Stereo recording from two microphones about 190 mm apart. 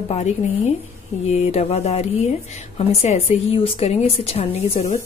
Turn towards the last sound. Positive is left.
turn(degrees=35)  # may be behind; listen again after turning